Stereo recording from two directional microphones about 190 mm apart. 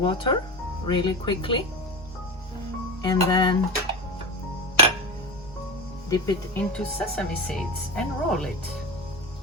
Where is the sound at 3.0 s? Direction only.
20° left (ahead or behind).